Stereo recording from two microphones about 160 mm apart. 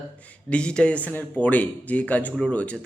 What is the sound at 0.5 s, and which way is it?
Speech, 5° left (ahead or behind).